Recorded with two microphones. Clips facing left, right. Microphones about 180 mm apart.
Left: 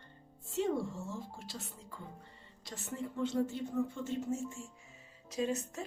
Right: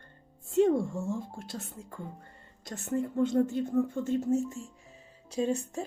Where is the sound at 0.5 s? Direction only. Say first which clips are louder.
Right 9 dB; 50° right (ahead or behind).